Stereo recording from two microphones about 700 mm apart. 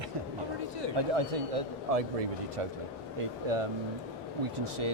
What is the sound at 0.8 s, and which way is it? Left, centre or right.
A man's voice, right.